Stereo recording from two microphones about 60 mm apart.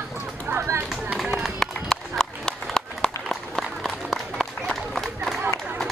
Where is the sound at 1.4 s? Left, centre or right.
Centre.